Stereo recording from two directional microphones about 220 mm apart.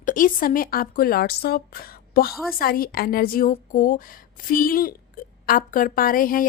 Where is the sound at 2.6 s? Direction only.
40° left (ahead or behind).